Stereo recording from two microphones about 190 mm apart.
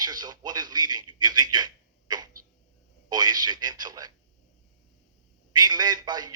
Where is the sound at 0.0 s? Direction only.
20° right (ahead or behind).